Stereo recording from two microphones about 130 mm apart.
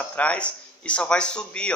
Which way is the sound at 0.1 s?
10° left (ahead or behind).